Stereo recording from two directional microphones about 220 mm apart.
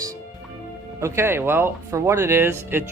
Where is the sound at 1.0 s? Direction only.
10° right (ahead or behind).